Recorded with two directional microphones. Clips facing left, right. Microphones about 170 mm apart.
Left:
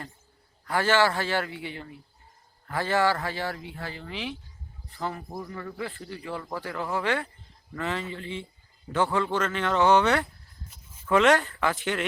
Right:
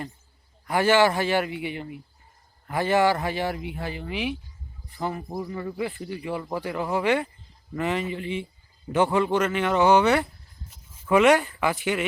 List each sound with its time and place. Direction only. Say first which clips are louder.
0.6 s speech: right 4 dB; 15° right (ahead or behind)